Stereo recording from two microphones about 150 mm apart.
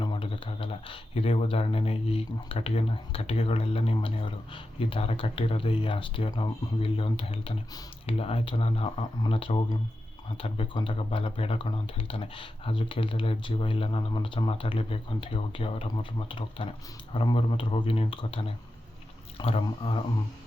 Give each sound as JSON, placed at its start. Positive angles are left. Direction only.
{"t": 0.0, "sound": "speech", "side_deg": 35}